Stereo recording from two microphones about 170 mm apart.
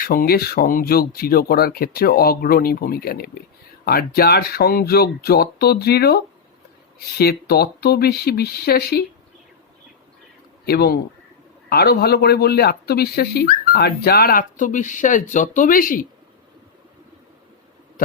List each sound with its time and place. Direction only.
0.0 s speech: 60° left (ahead or behind)
10.7 s speech: 65° left (ahead or behind)